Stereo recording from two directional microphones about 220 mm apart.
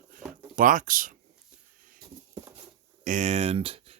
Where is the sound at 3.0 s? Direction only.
35° right (ahead or behind).